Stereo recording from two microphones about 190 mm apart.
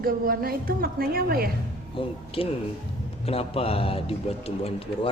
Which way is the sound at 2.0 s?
30° left (ahead or behind).